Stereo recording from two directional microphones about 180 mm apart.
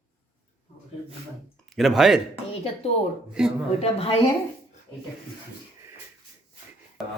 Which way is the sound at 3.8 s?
35° left (ahead or behind).